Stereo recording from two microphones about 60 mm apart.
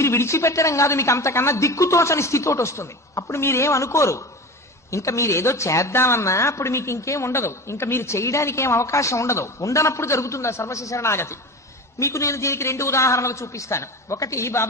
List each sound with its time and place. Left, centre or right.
0.0 s a woman's voice: left